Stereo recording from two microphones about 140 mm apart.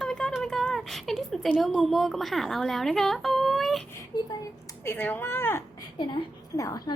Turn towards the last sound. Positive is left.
turn(degrees=25)  # may be behind; listen again after turning